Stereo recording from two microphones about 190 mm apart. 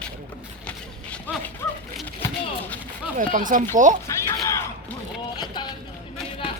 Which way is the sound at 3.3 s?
45° right (ahead or behind).